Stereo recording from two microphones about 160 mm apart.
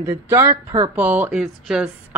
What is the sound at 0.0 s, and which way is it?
A man's voice, 15° right (ahead or behind).